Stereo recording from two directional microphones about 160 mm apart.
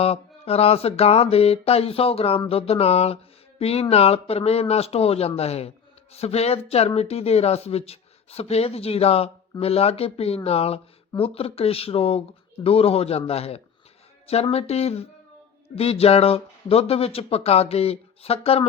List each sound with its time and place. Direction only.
0.0 s speech: 40° left (ahead or behind)